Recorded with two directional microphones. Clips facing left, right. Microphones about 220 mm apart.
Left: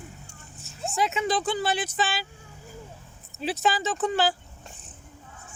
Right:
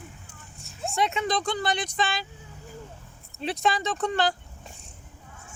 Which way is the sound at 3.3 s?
5° left (ahead or behind).